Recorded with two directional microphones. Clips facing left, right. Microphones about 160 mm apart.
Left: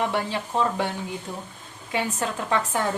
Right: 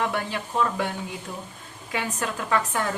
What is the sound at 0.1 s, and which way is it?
Speech, 30° left (ahead or behind).